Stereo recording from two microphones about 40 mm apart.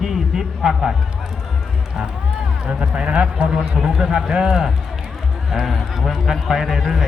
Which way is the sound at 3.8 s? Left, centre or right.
Centre.